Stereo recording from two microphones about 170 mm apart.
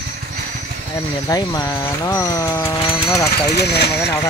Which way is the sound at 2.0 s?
20° left (ahead or behind).